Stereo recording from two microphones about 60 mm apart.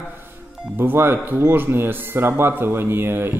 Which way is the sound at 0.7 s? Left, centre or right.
Right.